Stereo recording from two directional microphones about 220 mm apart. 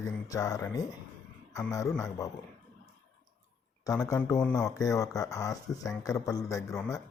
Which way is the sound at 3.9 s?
15° left (ahead or behind).